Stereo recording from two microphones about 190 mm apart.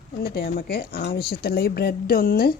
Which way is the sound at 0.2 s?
55° left (ahead or behind).